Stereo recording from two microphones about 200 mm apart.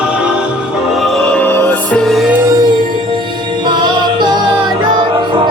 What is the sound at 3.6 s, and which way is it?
Music, 20° right (ahead or behind).